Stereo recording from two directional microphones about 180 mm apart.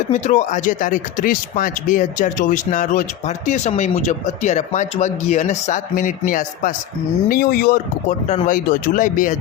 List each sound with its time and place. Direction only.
0.1 s speech: 45° left (ahead or behind)